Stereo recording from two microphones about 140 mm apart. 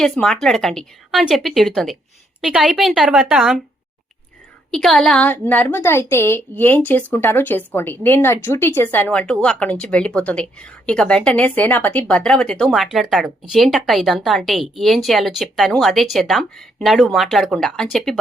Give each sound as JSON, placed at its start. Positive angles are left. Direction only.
{"t": 0.0, "sound": "speech", "side_deg": 5}
{"t": 4.7, "sound": "speech", "side_deg": 5}